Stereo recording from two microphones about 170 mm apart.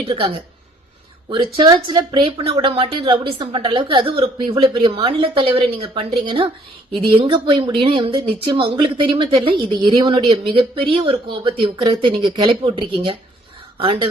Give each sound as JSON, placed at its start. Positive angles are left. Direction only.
{"t": 0.0, "sound": "a woman's voice", "side_deg": -30}
{"t": 1.5, "sound": "a woman's voice", "side_deg": -25}